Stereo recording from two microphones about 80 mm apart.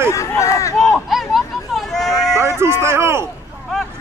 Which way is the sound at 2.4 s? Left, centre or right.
Right.